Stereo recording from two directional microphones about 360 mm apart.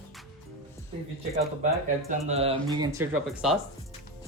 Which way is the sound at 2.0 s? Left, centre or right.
Centre.